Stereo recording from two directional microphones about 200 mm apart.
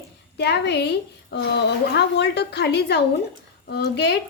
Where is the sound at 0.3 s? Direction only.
55° left (ahead or behind).